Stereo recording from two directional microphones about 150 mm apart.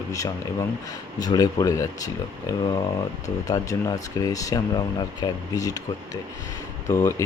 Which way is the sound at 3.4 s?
25° left (ahead or behind).